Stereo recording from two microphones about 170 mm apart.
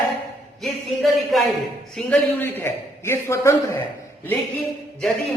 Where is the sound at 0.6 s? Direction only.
Centre (ahead or behind); by 3.8 s 15° left (ahead or behind).